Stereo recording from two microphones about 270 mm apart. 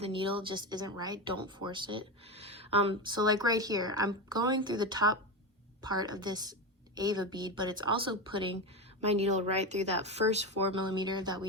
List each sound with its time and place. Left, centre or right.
0.0 s speech: centre